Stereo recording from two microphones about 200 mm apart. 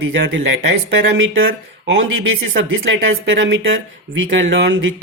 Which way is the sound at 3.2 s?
60° right (ahead or behind).